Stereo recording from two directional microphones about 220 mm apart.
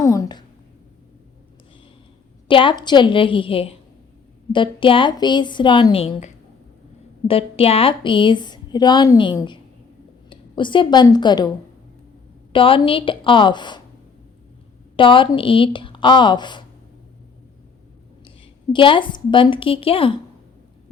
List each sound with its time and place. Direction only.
0.0 s a sound: 15° left (ahead or behind)
2.5 s a woman's voice: 20° left (ahead or behind)
12.5 s a woman's voice: 25° left (ahead or behind)
14.9 s a woman's voice: 20° left (ahead or behind)
18.3 s a woman's voice: 20° left (ahead or behind)